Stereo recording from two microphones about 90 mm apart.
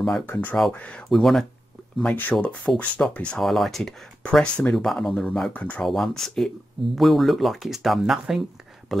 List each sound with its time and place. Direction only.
0.3 s speech: 20° left (ahead or behind); by 1.4 s centre (ahead or behind)
2.0 s speech: 20° left (ahead or behind)
3.4 s speech: centre (ahead or behind)
5.9 s speech: 5° left (ahead or behind)